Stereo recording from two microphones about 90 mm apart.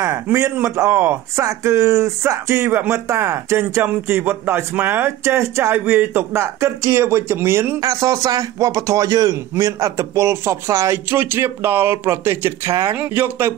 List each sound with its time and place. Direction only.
0.0 s a man's voice: 30° right (ahead or behind)
7.8 s a man's voice: 40° right (ahead or behind)